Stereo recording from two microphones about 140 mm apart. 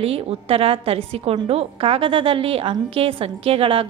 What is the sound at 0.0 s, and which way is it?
A woman's voice, 45° right (ahead or behind).